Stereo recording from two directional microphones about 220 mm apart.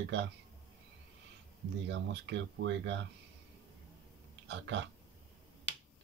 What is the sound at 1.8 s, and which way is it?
Speech, 55° right (ahead or behind).